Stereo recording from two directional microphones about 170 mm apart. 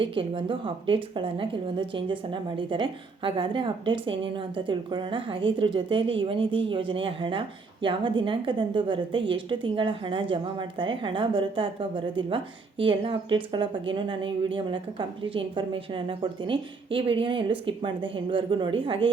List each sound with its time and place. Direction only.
0.0 s a woman's voice: 30° right (ahead or behind)